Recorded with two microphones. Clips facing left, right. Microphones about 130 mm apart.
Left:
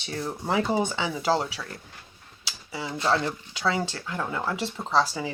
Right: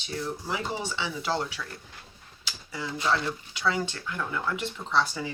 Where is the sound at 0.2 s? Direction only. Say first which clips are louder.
Left 6 dB; 60° left (ahead or behind).